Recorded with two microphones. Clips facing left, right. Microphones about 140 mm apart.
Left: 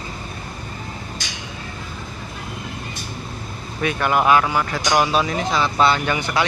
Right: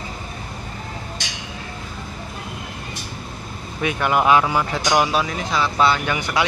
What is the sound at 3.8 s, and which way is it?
Speech, 10° right (ahead or behind).